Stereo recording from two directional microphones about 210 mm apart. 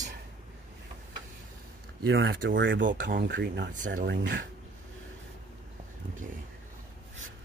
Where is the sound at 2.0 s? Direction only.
50° right (ahead or behind).